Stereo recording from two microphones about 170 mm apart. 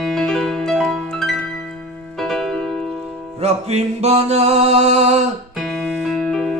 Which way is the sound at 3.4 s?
40° right (ahead or behind).